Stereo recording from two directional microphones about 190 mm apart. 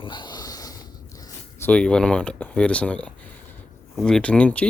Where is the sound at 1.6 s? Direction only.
5° left (ahead or behind).